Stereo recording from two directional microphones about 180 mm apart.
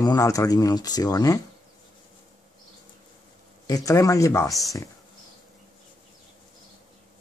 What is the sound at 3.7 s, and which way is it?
Speech, 20° left (ahead or behind).